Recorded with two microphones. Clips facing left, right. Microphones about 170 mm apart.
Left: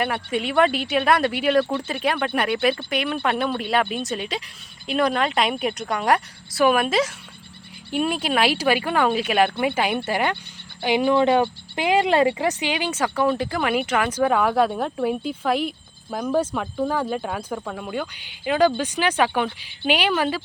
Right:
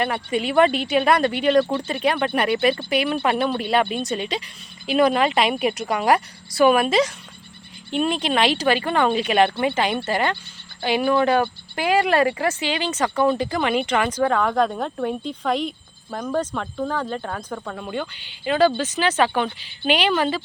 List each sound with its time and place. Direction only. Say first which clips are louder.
0.0 s speech: right 1 dB; centre (ahead or behind)